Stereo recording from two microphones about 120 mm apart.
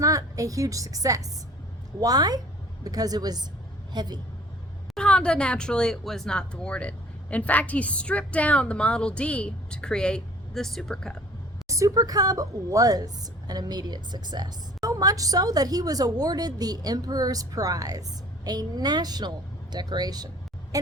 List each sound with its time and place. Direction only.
0.0 s a woman's voice: 30° right (ahead or behind)
4.9 s speech: 10° left (ahead or behind)
11.7 s a woman's voice: 30° right (ahead or behind)